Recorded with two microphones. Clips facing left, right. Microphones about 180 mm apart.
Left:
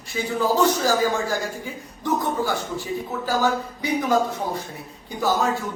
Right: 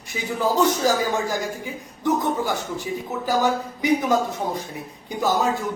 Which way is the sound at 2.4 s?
20° right (ahead or behind).